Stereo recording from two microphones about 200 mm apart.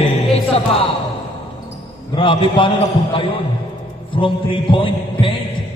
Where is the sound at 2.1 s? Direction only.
25° left (ahead or behind).